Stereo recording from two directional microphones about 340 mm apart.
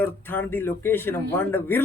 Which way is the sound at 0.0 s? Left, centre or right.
Centre.